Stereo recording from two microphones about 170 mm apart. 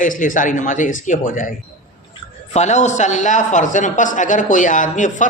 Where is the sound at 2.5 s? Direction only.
45° left (ahead or behind).